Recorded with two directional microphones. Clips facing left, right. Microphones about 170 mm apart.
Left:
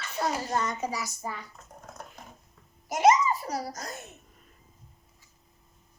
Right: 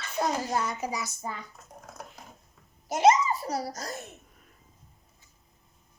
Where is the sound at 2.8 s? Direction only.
25° right (ahead or behind).